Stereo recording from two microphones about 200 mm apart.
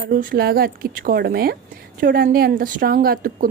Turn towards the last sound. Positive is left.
turn(degrees=-45)  # may be behind; listen again after turning